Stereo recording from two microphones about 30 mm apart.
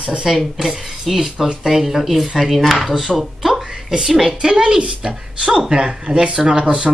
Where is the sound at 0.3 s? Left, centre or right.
Centre.